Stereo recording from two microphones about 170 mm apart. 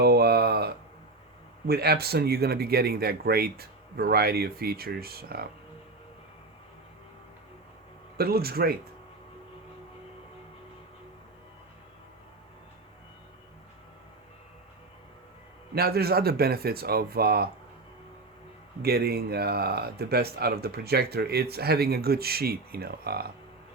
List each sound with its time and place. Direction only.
0.0 s a sound: 70° right (ahead or behind)
1.6 s speech: 65° right (ahead or behind)
8.2 s speech: 65° right (ahead or behind)
15.7 s speech: 65° right (ahead or behind)
18.8 s speech: 65° right (ahead or behind)